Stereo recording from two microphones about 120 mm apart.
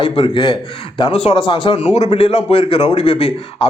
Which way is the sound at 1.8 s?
65° left (ahead or behind).